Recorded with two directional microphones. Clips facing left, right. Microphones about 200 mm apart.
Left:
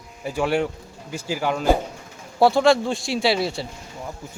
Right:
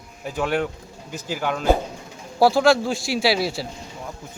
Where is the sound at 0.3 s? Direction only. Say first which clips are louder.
Left 1 dB; 10° left (ahead or behind).